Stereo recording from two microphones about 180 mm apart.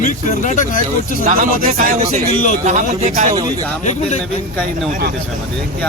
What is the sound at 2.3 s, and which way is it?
Speech, 45° left (ahead or behind).